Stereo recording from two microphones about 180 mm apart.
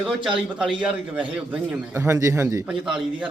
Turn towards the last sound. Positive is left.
turn(degrees=-5)  # may be behind; listen again after turning